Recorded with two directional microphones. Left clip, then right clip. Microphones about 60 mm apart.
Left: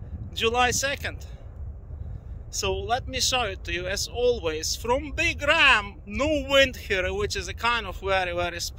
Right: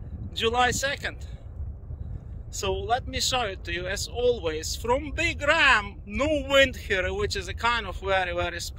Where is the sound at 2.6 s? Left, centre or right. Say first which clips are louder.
Even; right.